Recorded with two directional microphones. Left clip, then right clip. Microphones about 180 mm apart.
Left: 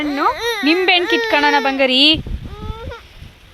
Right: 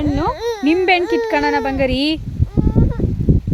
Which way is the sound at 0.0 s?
35° right (ahead or behind).